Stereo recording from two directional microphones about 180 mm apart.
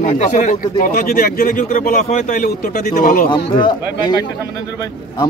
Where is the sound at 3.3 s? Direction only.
25° left (ahead or behind).